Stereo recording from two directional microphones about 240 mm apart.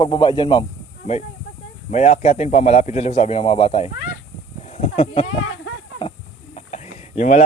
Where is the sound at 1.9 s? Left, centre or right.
Left.